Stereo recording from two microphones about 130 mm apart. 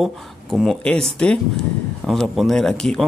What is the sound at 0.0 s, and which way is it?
Speech, centre (ahead or behind).